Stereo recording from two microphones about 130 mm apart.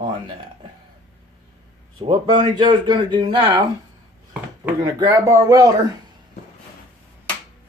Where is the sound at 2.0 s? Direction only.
35° right (ahead or behind).